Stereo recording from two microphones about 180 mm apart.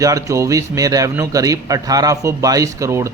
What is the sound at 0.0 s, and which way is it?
Speech, 20° right (ahead or behind).